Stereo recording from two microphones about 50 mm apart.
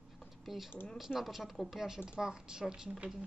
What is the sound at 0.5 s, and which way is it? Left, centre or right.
A woman's voice, centre.